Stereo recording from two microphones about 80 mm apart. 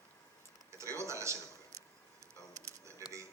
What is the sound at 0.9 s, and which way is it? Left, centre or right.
Speech, right.